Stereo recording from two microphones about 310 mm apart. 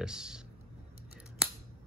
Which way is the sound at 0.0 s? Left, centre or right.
Centre.